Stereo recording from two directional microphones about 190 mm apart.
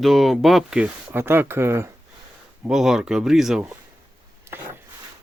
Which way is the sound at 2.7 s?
Centre (ahead or behind).